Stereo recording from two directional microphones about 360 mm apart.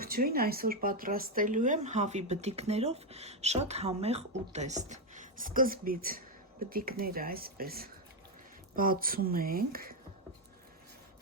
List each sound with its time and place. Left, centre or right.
0.0 s speech: right